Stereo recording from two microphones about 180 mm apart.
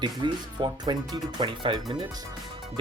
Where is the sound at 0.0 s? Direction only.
25° right (ahead or behind).